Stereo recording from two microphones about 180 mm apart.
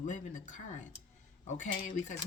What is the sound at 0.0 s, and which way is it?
Speech, 45° left (ahead or behind).